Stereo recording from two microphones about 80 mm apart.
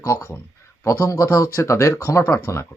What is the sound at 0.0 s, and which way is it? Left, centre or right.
Speech, left.